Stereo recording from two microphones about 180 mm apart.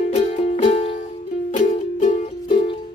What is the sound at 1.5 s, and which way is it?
Music, 40° left (ahead or behind).